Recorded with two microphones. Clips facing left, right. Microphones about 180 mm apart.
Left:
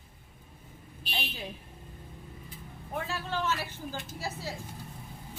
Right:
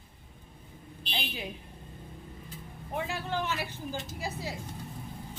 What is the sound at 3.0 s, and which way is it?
A woman's voice, 15° right (ahead or behind).